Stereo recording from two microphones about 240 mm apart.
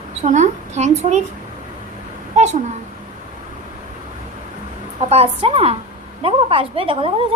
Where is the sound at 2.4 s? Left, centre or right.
Right.